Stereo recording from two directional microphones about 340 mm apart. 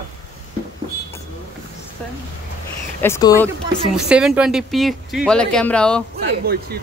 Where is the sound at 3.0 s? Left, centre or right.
Centre.